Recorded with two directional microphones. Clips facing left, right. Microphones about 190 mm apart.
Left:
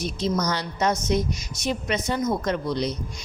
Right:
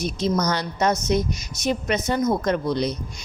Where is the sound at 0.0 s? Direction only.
50° right (ahead or behind).